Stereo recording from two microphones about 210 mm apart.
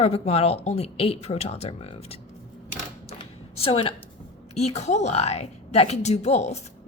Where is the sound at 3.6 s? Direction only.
25° left (ahead or behind).